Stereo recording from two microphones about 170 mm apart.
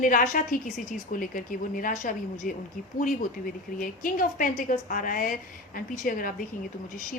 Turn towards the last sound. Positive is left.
turn(degrees=55)  # may be behind; listen again after turning